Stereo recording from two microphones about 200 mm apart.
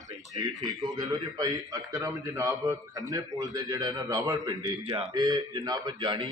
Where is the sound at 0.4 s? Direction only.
20° right (ahead or behind).